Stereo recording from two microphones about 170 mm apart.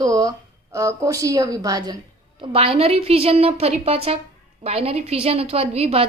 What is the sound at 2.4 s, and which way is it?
A woman's voice, 35° right (ahead or behind).